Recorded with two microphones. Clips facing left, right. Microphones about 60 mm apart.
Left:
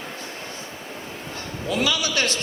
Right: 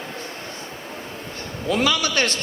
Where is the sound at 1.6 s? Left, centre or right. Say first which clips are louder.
Right 3 dB; right.